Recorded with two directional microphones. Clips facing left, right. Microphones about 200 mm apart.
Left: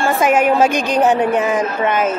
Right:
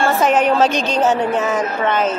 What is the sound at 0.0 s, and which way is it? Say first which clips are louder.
A woman's voice: left 1 dB; 10° left (ahead or behind).